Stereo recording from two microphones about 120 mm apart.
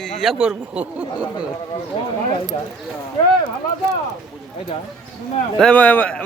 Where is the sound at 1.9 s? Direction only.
50° left (ahead or behind).